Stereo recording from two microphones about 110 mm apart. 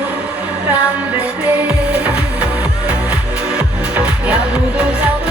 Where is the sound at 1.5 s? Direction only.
15° right (ahead or behind).